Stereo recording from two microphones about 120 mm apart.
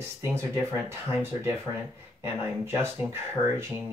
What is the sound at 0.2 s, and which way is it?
Speech, 20° right (ahead or behind).